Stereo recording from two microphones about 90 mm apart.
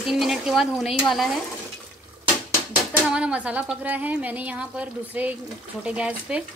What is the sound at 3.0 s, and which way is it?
Speech, 10° right (ahead or behind).